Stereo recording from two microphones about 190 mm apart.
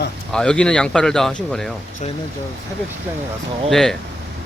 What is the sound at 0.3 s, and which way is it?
Speech, 5° left (ahead or behind).